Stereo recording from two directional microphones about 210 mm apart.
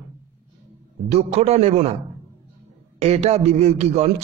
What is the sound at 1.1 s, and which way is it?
Speech, 30° right (ahead or behind).